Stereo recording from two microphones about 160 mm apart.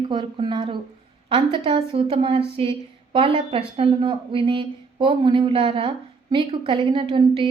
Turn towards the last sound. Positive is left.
turn(degrees=-30)  # may be behind; listen again after turning